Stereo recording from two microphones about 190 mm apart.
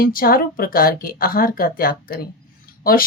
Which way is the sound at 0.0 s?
50° left (ahead or behind).